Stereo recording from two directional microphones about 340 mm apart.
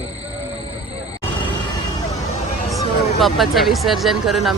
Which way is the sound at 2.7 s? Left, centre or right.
Centre.